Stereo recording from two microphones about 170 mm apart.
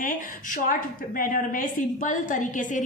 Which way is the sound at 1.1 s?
55° left (ahead or behind).